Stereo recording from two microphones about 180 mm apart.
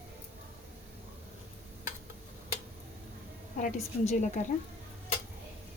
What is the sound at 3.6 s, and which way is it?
Speech, 40° left (ahead or behind).